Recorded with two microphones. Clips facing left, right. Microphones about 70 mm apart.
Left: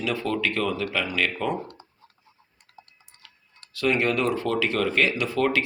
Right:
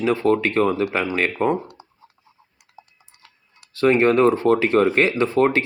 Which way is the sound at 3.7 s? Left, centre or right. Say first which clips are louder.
Right 7 dB; right.